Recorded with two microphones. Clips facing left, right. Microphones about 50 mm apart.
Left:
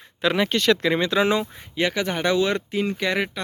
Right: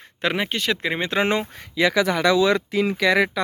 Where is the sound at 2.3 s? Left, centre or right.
Right.